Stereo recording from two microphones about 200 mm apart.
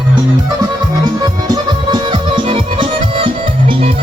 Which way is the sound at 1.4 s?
20° right (ahead or behind).